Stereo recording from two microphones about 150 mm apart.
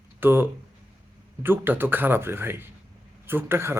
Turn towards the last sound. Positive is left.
turn(degrees=-15)  # may be behind; listen again after turning